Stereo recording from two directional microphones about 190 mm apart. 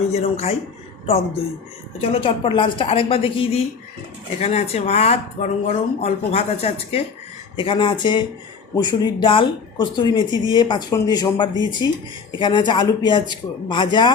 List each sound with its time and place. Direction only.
0.1 s speech: 35° left (ahead or behind)